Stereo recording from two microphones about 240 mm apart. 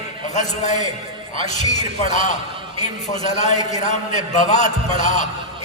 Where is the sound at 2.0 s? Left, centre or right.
Left.